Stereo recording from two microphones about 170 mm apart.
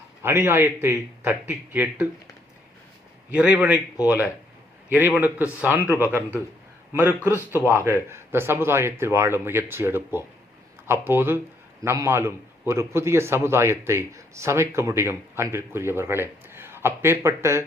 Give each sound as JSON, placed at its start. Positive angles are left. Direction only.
{"t": 0.2, "sound": "a man's voice", "side_deg": -15}
{"t": 3.2, "sound": "a man's voice", "side_deg": -5}
{"t": 7.2, "sound": "a man's voice", "side_deg": 15}
{"t": 8.0, "sound": "a man's voice", "side_deg": -15}